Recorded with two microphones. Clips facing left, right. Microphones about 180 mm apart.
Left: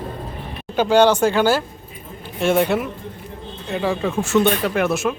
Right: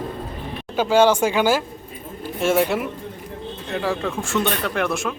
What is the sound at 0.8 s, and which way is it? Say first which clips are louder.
Speech: left 2 dB; 5° right (ahead or behind).